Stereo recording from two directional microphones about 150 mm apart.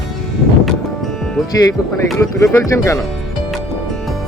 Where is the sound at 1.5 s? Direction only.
25° left (ahead or behind).